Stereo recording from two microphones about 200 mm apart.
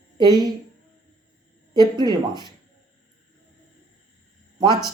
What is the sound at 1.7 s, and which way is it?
Speech, 20° right (ahead or behind).